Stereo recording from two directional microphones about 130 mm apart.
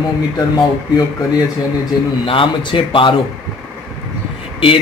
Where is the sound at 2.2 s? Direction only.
40° left (ahead or behind).